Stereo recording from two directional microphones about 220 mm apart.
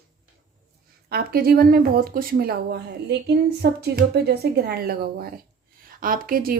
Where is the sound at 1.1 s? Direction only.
45° right (ahead or behind).